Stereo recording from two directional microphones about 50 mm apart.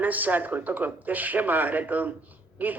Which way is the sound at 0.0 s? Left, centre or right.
Right.